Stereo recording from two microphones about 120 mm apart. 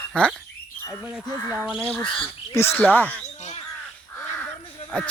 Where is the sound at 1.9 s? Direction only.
5° left (ahead or behind).